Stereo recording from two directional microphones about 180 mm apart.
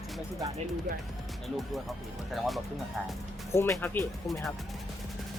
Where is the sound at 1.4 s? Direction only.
Centre (ahead or behind).